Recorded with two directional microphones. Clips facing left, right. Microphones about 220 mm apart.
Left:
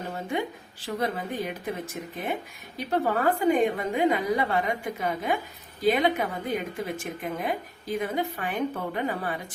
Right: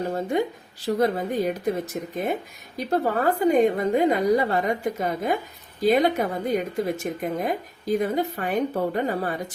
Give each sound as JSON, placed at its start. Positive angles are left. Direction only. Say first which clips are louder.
{"t": 0.1, "sound": "a woman's voice", "louder": "right 6 dB", "side_deg": -40}
{"t": 2.7, "sound": "a woman's voice", "louder": "right 3 dB", "side_deg": -40}